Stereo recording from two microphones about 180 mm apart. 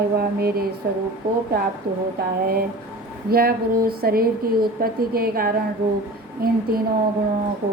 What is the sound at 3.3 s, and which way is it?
A woman's voice, 55° right (ahead or behind).